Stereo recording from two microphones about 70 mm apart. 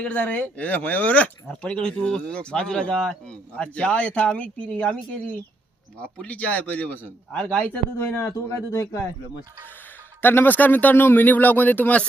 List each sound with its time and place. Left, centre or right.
0.0 s speech: centre
6.0 s speech: centre
8.2 s speech: left
8.7 s speech: left
10.2 s speech: left